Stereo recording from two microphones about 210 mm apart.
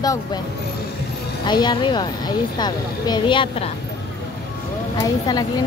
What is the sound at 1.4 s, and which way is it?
Speech, 20° left (ahead or behind).